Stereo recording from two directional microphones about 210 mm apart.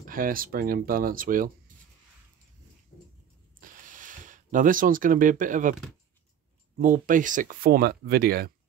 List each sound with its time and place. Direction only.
0.0 s speech: 40° right (ahead or behind)
2.9 s dog: 45° left (ahead or behind)
3.5 s a sound: 40° right (ahead or behind)
6.8 s speech: 40° right (ahead or behind)